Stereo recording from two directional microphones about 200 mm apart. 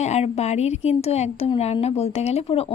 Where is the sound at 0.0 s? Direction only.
35° left (ahead or behind).